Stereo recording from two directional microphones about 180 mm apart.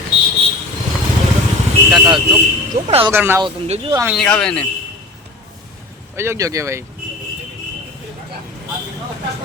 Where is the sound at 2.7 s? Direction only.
50° right (ahead or behind).